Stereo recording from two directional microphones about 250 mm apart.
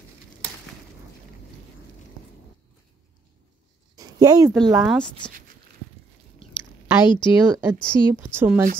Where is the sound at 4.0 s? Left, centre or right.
Centre.